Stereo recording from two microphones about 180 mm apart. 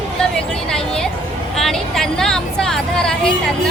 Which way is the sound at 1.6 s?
Centre (ahead or behind).